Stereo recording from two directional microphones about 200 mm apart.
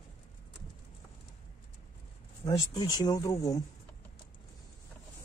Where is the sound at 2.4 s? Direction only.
20° left (ahead or behind).